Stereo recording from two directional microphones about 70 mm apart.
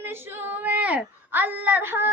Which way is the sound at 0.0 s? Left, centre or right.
Right.